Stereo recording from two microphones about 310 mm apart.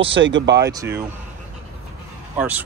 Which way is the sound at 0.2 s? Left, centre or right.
Right.